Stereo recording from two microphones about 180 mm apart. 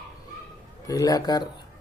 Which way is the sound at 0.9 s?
20° left (ahead or behind).